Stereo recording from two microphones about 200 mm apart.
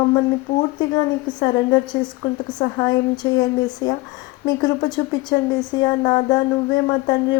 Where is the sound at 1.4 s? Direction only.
20° left (ahead or behind).